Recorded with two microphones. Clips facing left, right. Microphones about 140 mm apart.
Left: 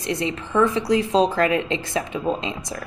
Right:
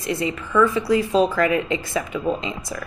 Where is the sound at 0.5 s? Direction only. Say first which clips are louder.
Right 1 dB; 25° left (ahead or behind).